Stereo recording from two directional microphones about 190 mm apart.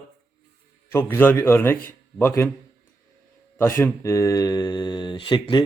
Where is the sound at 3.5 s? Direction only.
10° left (ahead or behind).